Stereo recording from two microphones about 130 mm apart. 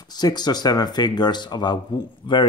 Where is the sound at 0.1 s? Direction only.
30° left (ahead or behind).